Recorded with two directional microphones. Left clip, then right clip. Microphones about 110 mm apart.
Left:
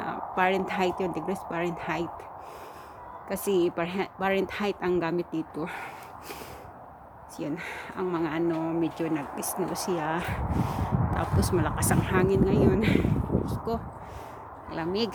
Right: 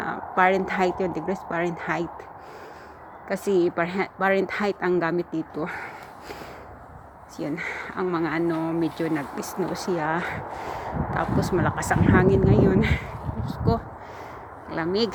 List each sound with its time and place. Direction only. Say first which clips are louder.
0.0 s speech: right 5 dB; 20° left (ahead or behind)
3.2 s speech: right 4 dB; 20° left (ahead or behind)
7.3 s speech: right 5 dB; 20° left (ahead or behind)